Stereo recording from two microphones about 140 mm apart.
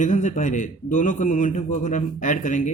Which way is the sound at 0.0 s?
60° left (ahead or behind).